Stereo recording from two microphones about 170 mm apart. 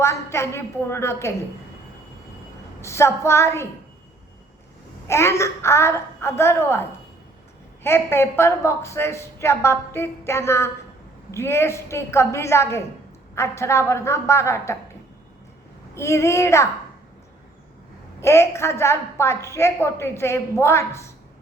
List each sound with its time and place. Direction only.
0.0 s a woman's voice: 15° left (ahead or behind)
2.8 s a woman's voice: 15° left (ahead or behind)
5.0 s a woman's voice: 15° left (ahead or behind)
7.9 s a woman's voice: 15° left (ahead or behind)
16.0 s a woman's voice: 15° left (ahead or behind)
18.2 s a woman's voice: 15° left (ahead or behind)